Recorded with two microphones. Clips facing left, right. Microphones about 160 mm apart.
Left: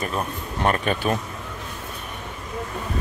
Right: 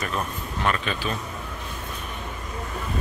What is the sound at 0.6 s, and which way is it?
Speech, 45° left (ahead or behind).